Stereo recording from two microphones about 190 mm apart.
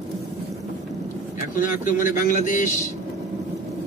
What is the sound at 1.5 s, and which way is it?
Speech, 45° left (ahead or behind).